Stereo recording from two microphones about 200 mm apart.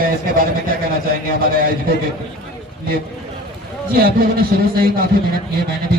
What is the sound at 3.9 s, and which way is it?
A man's voice, 50° right (ahead or behind).